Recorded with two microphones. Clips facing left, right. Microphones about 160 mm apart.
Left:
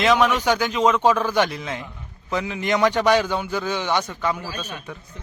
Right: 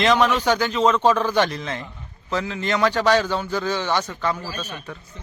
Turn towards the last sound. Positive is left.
turn(degrees=10)  # may be behind; listen again after turning